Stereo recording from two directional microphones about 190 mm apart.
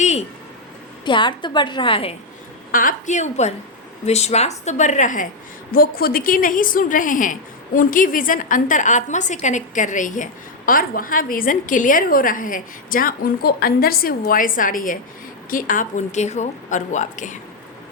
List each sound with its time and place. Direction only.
0.0 s a sound: 35° left (ahead or behind)
1.0 s a woman's voice: 25° left (ahead or behind)
2.7 s a woman's voice: 40° left (ahead or behind)